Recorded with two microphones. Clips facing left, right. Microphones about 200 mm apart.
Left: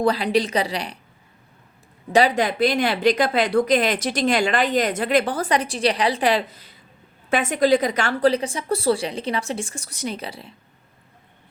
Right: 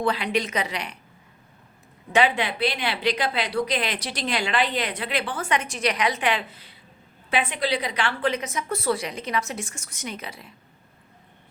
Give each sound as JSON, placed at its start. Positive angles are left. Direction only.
{"t": 0.0, "sound": "a woman's voice", "side_deg": 35}
{"t": 2.1, "sound": "a woman's voice", "side_deg": 40}